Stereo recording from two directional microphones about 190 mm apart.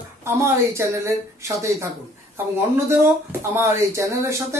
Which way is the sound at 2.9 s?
15° right (ahead or behind).